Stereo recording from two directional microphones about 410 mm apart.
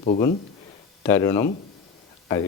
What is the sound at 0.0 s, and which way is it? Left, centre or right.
A man's voice, centre.